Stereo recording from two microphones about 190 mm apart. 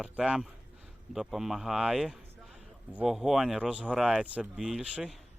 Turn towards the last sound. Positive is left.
turn(degrees=-5)  # may be behind; listen again after turning